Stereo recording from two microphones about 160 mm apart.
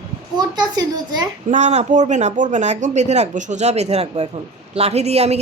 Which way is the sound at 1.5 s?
45° right (ahead or behind).